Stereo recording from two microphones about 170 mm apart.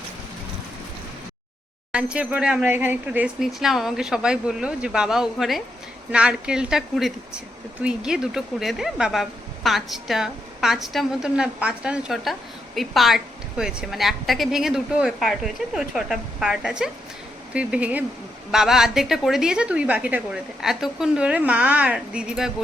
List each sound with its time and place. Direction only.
1.9 s a woman's voice: 5° right (ahead or behind)